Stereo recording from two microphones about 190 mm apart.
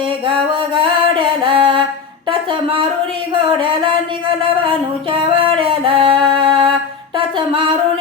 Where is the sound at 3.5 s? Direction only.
25° right (ahead or behind).